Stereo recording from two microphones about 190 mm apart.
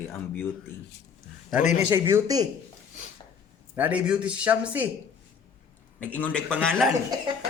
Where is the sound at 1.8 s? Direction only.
15° right (ahead or behind).